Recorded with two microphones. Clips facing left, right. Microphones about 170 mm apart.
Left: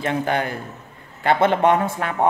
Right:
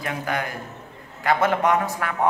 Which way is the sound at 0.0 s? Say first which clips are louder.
Left 5 dB; 25° left (ahead or behind).